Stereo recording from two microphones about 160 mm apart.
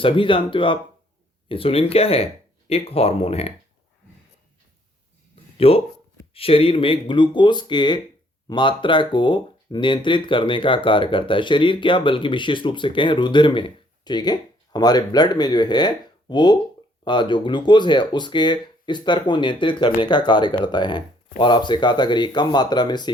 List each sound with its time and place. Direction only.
0.0 s speech: 30° left (ahead or behind)
5.5 s speech: 35° left (ahead or behind)